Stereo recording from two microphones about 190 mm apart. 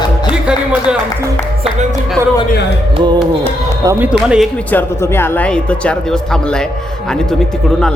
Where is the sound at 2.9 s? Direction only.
20° right (ahead or behind).